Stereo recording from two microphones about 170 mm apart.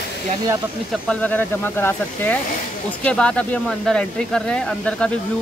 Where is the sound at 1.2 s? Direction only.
10° left (ahead or behind).